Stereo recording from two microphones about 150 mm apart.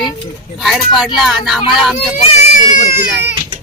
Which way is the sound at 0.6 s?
Centre (ahead or behind).